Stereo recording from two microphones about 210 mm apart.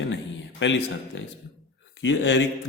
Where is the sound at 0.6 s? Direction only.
60° left (ahead or behind).